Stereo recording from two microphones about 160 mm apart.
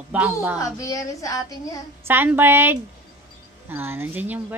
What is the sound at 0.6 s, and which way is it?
A child's voice, 20° left (ahead or behind).